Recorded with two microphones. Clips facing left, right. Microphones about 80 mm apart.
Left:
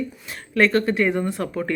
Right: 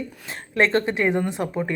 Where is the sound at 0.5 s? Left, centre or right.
Right.